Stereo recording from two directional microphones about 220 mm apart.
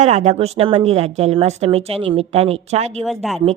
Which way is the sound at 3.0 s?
Centre (ahead or behind).